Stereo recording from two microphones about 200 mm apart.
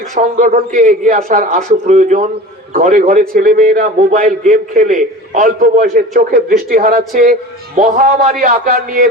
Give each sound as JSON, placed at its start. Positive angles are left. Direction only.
{"t": 0.1, "sound": "a man's voice", "side_deg": -40}